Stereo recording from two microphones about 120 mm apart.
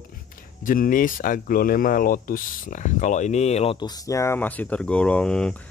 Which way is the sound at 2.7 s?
90° left.